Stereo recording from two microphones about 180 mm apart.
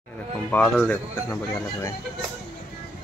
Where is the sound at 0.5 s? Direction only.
5° left (ahead or behind).